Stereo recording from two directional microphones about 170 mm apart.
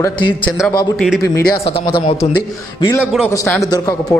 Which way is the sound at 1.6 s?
35° left (ahead or behind).